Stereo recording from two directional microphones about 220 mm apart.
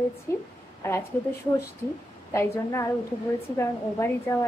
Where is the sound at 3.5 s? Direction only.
10° left (ahead or behind).